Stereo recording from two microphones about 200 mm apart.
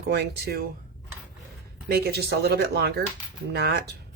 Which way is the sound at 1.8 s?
50° right (ahead or behind).